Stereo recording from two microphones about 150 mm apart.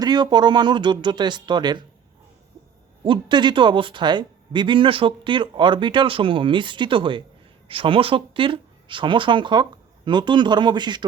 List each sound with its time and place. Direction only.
0.0 s speech: 30° right (ahead or behind)
3.0 s speech: 30° right (ahead or behind)